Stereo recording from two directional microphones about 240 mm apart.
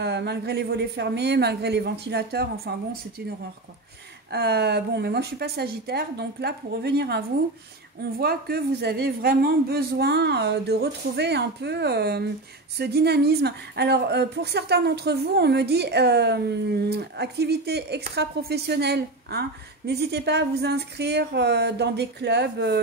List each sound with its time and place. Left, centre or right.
0.0 s speech: right
4.3 s speech: right